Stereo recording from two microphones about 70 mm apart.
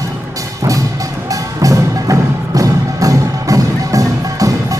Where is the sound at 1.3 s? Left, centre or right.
Right.